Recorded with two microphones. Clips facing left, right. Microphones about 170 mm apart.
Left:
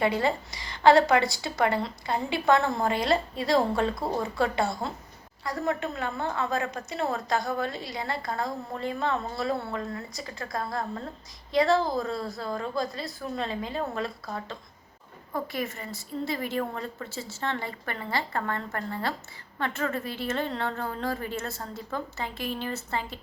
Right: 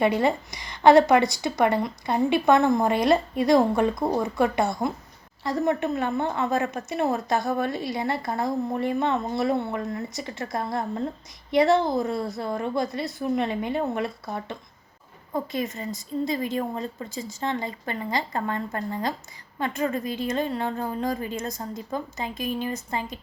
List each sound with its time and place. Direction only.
0.0 s a woman's voice: 20° right (ahead or behind)